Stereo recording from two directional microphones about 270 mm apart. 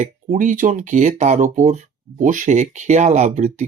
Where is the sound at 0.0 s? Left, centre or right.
Right.